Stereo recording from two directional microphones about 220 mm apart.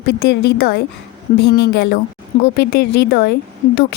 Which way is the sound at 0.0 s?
50° left (ahead or behind).